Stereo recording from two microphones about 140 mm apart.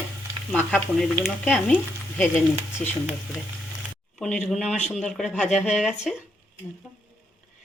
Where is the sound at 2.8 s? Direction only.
5° left (ahead or behind).